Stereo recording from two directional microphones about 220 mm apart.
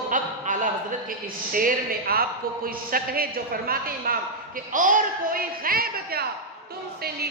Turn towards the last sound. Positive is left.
turn(degrees=-45)  # may be behind; listen again after turning